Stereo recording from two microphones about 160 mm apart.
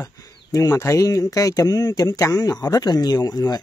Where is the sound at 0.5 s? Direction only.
20° left (ahead or behind).